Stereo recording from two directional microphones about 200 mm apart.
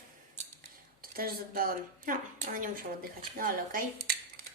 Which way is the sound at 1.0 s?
45° right (ahead or behind).